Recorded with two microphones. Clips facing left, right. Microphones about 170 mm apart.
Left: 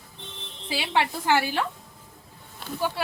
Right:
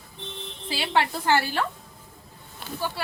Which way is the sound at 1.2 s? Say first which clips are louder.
Even; 15° left (ahead or behind).